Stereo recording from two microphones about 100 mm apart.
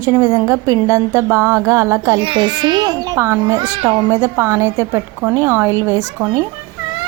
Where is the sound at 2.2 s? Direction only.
55° right (ahead or behind); by 6.3 s 30° right (ahead or behind).